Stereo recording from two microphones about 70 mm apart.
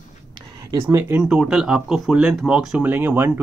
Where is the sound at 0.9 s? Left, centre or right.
Right.